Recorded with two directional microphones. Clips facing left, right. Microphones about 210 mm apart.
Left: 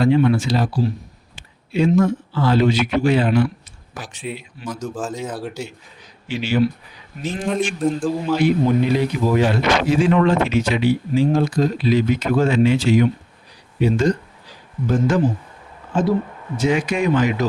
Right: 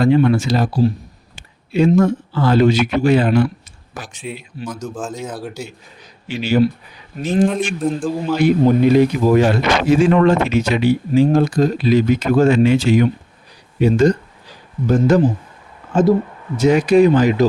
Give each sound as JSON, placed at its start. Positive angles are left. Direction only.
{"t": 0.0, "sound": "speech", "side_deg": -45}
{"t": 1.4, "sound": "a sound", "side_deg": -45}
{"t": 2.0, "sound": "speech", "side_deg": -50}
{"t": 4.2, "sound": "speech", "side_deg": 0}
{"t": 6.2, "sound": "speech", "side_deg": -40}
{"t": 7.4, "sound": "speech", "side_deg": 0}
{"t": 8.6, "sound": "speech", "side_deg": -45}
{"t": 16.6, "sound": "speech", "side_deg": -40}